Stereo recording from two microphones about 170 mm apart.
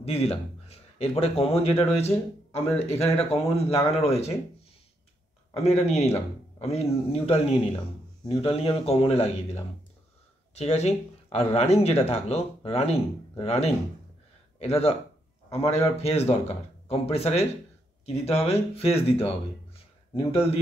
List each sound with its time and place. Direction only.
0.0 s speech: 35° left (ahead or behind)
5.6 s speech: 40° left (ahead or behind)
20.2 s speech: 35° left (ahead or behind)